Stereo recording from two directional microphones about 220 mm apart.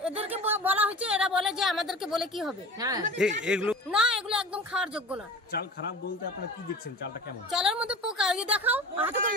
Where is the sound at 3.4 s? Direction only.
5° right (ahead or behind).